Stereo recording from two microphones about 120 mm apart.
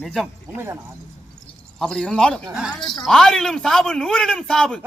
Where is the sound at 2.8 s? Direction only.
35° left (ahead or behind).